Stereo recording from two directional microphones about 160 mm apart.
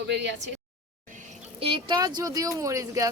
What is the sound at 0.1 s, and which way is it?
Speech, 90° right.